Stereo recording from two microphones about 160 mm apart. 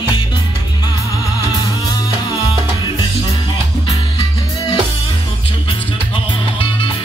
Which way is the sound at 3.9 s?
30° left (ahead or behind).